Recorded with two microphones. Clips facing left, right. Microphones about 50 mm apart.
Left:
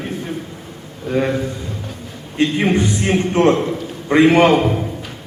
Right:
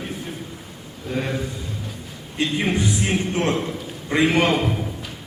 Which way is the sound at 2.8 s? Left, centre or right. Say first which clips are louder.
Left 5 dB; centre.